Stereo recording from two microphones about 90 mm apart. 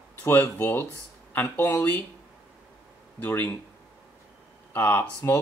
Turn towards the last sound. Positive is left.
turn(degrees=25)  # may be behind; listen again after turning